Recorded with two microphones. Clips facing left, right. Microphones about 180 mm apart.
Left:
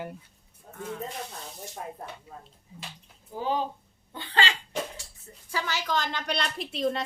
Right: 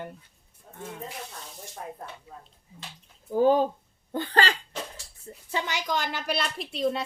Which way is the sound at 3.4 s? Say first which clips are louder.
Right 9 dB; 50° right (ahead or behind).